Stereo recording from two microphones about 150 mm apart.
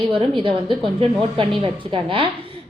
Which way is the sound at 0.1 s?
35° right (ahead or behind).